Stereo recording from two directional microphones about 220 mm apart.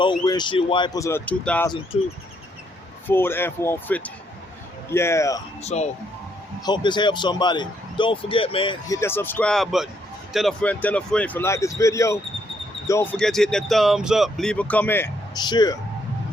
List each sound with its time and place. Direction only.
0.0 s speech: 20° left (ahead or behind)
1.9 s speech: 30° left (ahead or behind)
3.1 s speech: 10° left (ahead or behind)
5.6 s speech: 30° left (ahead or behind)
6.7 s speech: 20° left (ahead or behind)